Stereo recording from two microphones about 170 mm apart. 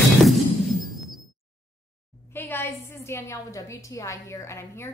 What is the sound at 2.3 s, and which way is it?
A woman's voice, 10° left (ahead or behind).